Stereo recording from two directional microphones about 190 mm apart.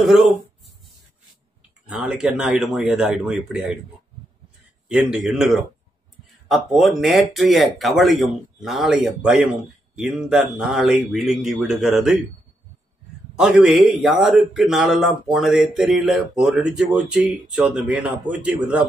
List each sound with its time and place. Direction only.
0.0 s speech: centre (ahead or behind)
1.9 s speech: 5° right (ahead or behind)
4.8 s speech: 5° right (ahead or behind)
13.4 s speech: 5° right (ahead or behind)